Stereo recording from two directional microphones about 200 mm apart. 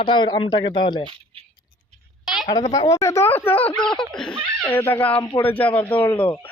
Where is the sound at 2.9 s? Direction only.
15° left (ahead or behind).